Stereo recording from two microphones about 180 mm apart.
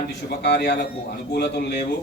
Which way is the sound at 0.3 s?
65° left (ahead or behind).